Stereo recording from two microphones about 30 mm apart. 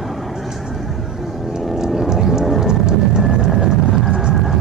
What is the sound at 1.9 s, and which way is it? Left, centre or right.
Vehicle, centre.